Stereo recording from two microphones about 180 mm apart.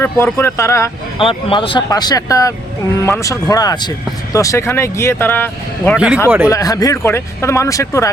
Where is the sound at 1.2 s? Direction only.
30° left (ahead or behind); by 6.0 s 10° left (ahead or behind).